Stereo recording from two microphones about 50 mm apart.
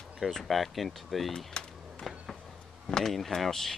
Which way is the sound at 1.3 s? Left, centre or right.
Centre.